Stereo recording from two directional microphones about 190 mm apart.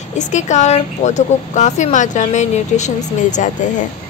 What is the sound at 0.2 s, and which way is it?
Speech, 40° left (ahead or behind).